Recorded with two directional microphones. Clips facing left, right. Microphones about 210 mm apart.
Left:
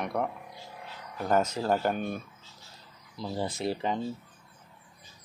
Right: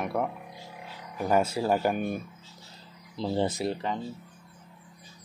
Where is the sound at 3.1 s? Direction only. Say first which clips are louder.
Right 6 dB; 25° right (ahead or behind).